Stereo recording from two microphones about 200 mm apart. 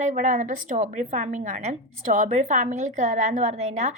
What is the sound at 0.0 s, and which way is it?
A woman's voice, 40° right (ahead or behind).